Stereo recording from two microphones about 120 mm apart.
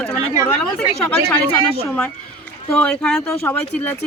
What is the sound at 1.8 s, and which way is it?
Speech, 10° left (ahead or behind).